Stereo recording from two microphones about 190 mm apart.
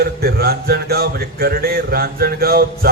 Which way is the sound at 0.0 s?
55° right (ahead or behind).